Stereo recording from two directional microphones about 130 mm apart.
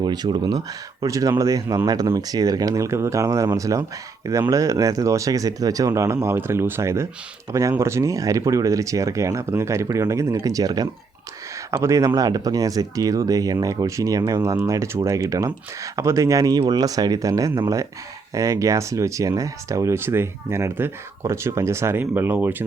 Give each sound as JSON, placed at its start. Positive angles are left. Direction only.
{"t": 0.0, "sound": "speech", "side_deg": -35}